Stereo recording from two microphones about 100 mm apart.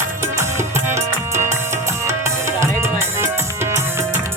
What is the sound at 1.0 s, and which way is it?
Music, 25° right (ahead or behind).